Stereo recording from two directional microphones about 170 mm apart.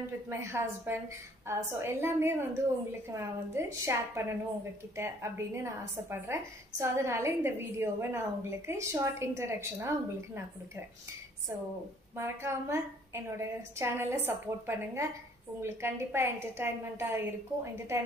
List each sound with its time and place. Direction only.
0.3 s a woman's voice: 15° right (ahead or behind)
12.2 s a woman's voice: 15° right (ahead or behind)